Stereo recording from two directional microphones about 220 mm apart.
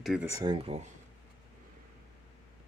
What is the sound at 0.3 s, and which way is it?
Speech, 15° right (ahead or behind).